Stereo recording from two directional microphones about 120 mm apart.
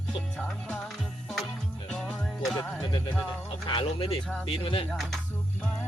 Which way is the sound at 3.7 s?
45° left (ahead or behind).